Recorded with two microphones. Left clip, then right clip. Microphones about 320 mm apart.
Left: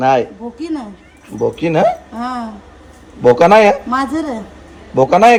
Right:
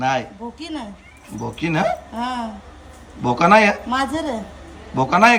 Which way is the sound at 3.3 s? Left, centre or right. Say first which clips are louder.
Left 3 dB; centre.